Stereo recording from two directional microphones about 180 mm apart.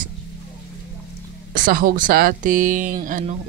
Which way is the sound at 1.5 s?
50° right (ahead or behind).